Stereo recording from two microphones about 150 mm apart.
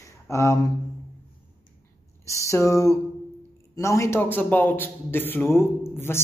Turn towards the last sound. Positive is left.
turn(degrees=15)  # may be behind; listen again after turning